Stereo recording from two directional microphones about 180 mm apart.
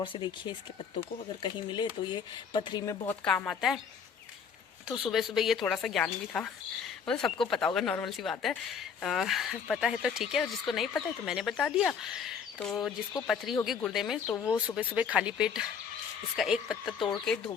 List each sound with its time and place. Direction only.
0.0 s speech: 25° left (ahead or behind)
3.2 s speech: 5° left (ahead or behind)
4.9 s speech: centre (ahead or behind)
14.3 s speech: 15° left (ahead or behind)
14.8 s speech: 10° right (ahead or behind)